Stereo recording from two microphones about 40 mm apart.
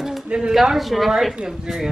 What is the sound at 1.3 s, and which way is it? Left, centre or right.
Speech, centre.